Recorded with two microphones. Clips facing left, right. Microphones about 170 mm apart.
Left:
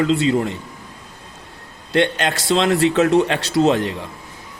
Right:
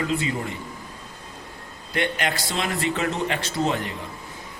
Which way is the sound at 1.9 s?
80° left.